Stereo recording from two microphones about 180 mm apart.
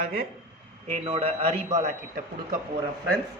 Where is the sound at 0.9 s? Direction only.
35° right (ahead or behind).